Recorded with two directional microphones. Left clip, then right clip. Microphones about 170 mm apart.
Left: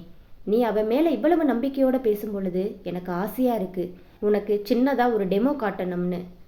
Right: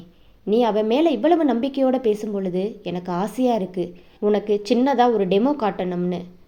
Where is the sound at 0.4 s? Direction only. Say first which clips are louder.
Right 3 dB; 30° right (ahead or behind).